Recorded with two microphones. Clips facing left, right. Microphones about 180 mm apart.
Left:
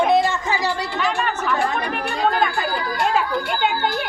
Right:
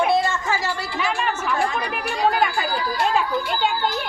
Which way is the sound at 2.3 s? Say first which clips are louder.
Left 1 dB; 5° right (ahead or behind).